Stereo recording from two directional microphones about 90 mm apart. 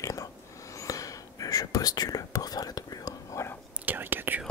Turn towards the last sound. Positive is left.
turn(degrees=-25)  # may be behind; listen again after turning